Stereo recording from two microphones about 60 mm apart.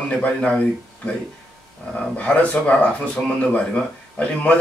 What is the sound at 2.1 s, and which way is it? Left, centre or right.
Speech, left.